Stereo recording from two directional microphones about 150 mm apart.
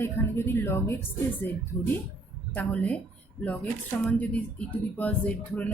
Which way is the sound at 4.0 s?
10° left (ahead or behind).